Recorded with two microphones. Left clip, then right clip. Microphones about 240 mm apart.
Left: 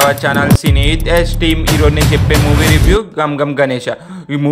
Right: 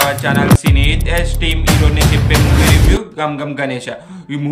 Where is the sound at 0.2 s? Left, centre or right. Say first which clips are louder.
Left 1 dB; left.